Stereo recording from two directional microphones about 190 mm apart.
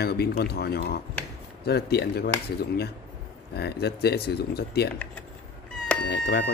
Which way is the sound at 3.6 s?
60° left (ahead or behind).